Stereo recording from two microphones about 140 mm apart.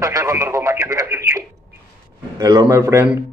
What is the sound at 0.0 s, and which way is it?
Radio, 20° right (ahead or behind).